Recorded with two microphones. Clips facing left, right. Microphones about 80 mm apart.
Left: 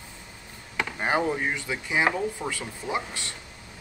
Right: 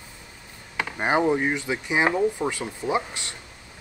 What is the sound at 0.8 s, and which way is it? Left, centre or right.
Speech, centre.